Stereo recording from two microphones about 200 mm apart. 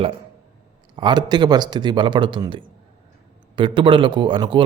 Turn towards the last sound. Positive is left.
turn(degrees=-25)  # may be behind; listen again after turning